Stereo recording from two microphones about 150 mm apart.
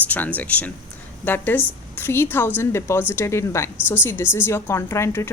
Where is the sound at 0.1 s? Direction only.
10° left (ahead or behind).